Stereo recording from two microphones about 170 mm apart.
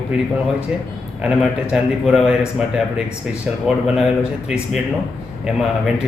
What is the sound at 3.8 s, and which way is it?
Speech, 5° right (ahead or behind).